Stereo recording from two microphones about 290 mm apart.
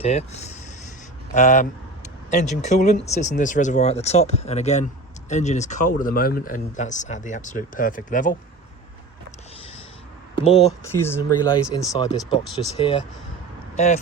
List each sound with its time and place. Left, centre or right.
0.0 s speech: left
10.3 s speech: left
10.8 s speech: centre
13.7 s speech: left